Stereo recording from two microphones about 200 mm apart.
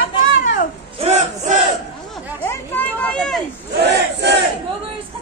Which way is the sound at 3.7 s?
55° right (ahead or behind).